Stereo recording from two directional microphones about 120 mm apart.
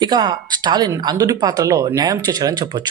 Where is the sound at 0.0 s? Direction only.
35° right (ahead or behind).